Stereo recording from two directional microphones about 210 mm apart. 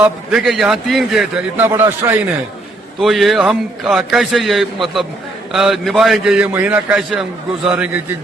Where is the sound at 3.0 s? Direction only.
Centre (ahead or behind).